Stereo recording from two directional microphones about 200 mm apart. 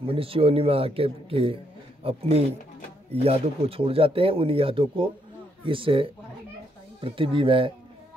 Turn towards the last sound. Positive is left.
turn(degrees=-25)  # may be behind; listen again after turning